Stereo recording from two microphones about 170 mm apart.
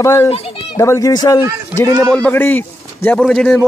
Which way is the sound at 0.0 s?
20° left (ahead or behind).